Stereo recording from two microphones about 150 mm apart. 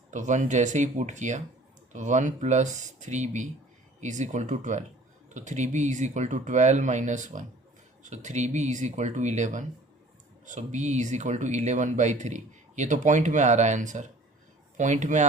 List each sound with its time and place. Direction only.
0.1 s speech: 55° right (ahead or behind)